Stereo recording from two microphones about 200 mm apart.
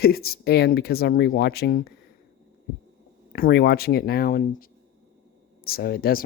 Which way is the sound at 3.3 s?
50° left (ahead or behind).